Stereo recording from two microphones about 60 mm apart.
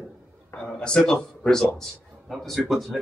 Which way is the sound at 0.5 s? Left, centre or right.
Centre.